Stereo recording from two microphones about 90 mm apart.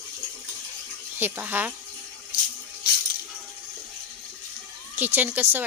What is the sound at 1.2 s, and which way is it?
Speech, 20° right (ahead or behind).